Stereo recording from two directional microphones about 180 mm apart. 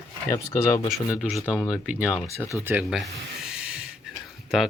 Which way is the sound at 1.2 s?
Centre (ahead or behind).